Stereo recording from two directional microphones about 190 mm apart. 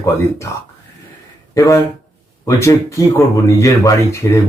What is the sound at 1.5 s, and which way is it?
Speech, 15° left (ahead or behind).